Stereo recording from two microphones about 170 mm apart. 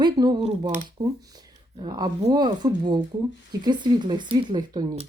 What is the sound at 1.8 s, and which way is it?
Speech, 25° right (ahead or behind).